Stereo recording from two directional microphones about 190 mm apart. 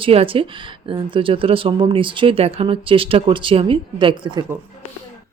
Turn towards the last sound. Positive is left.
turn(degrees=-25)  # may be behind; listen again after turning